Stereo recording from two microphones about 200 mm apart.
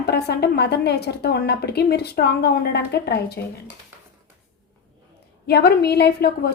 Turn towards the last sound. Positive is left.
turn(degrees=50)  # may be behind; listen again after turning